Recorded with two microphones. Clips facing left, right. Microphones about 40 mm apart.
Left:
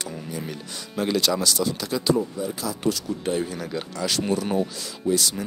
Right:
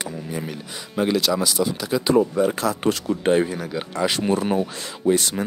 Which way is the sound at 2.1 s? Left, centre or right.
Right.